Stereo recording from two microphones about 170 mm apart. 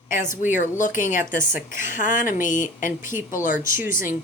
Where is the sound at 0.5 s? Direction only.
50° left (ahead or behind).